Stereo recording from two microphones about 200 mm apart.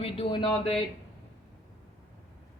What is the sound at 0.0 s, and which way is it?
Speech, 25° left (ahead or behind).